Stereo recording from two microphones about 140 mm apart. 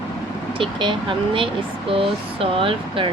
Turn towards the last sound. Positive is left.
turn(degrees=-40)  # may be behind; listen again after turning